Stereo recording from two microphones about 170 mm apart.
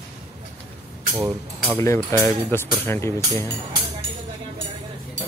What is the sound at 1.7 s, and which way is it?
Speech, 15° left (ahead or behind).